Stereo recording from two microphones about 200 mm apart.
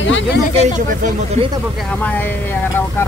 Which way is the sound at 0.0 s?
65° left (ahead or behind).